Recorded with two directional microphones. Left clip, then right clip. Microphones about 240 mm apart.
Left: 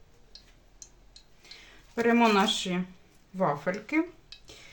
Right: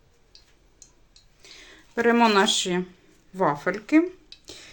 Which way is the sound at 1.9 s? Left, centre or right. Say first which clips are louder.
Right 4 dB; right.